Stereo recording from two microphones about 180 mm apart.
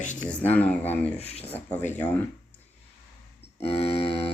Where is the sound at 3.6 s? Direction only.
35° left (ahead or behind).